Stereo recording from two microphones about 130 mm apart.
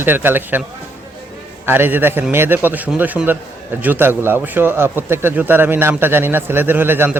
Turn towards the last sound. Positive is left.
turn(degrees=-15)  # may be behind; listen again after turning